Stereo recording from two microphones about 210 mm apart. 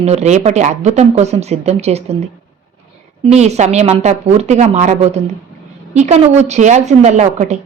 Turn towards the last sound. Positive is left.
turn(degrees=-35)  # may be behind; listen again after turning